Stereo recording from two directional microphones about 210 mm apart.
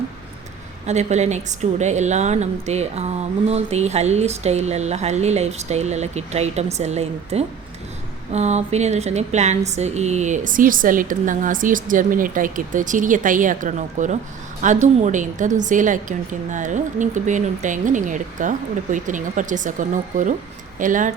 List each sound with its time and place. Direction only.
0.9 s a woman's voice: 35° right (ahead or behind)